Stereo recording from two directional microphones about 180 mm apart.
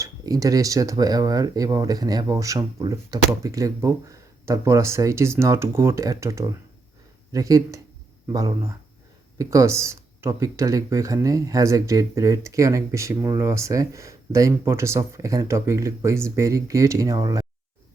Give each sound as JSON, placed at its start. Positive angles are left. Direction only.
{"t": 0.0, "sound": "speech", "side_deg": -20}